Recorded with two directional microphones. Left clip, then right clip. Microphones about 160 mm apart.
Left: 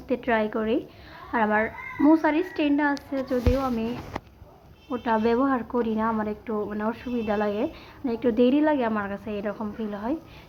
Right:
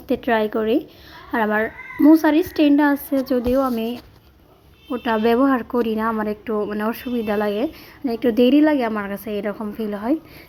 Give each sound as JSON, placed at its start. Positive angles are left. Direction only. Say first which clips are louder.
{"t": 0.1, "sound": "a woman's voice", "louder": "right 5 dB", "side_deg": -45}